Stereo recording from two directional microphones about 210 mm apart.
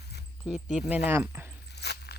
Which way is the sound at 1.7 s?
50° left (ahead or behind).